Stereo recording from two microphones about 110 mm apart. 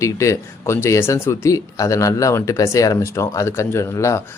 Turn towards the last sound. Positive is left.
turn(degrees=25)  # may be behind; listen again after turning